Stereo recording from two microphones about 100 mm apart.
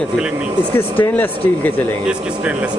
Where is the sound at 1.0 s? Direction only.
20° left (ahead or behind).